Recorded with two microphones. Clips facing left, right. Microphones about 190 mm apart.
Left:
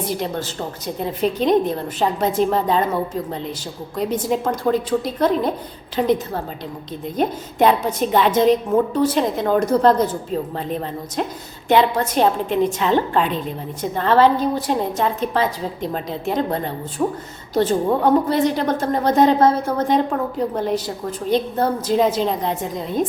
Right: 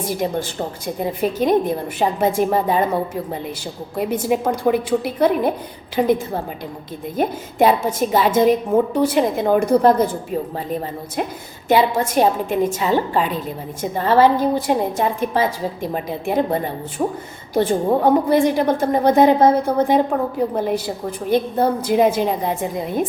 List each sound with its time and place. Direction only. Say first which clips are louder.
0.0 s a woman's voice: right 2 dB; 10° right (ahead or behind)
3.9 s a woman's voice: right 1 dB; 10° right (ahead or behind)
11.7 s a woman's voice: even; 10° right (ahead or behind)